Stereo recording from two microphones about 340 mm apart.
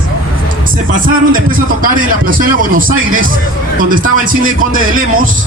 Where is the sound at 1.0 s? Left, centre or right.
Right.